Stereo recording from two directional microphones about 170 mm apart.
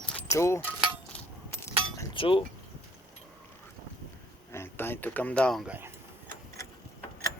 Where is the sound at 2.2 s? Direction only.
30° left (ahead or behind).